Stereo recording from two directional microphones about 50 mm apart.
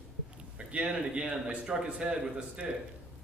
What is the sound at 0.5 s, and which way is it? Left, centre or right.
A man's voice, right.